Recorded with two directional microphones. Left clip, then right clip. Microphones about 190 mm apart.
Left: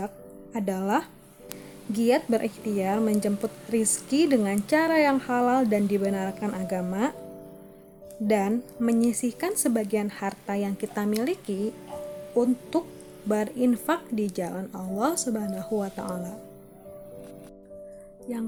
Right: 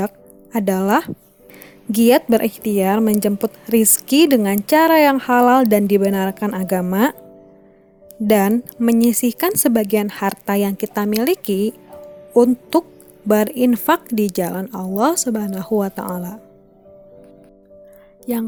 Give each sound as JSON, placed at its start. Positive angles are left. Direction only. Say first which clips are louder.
{"t": 0.5, "sound": "a woman's voice", "louder": "right 10 dB", "side_deg": -50}
{"t": 8.3, "sound": "a woman's voice", "louder": "right 9 dB", "side_deg": -50}